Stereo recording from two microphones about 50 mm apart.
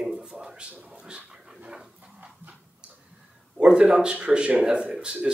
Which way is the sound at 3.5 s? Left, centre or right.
Centre.